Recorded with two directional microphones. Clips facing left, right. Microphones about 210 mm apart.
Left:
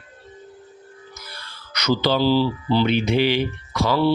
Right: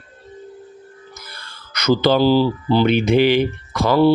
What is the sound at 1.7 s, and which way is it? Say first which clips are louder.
Speech: right 5 dB; 50° right (ahead or behind).